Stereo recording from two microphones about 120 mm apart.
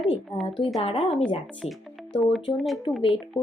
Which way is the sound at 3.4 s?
25° left (ahead or behind).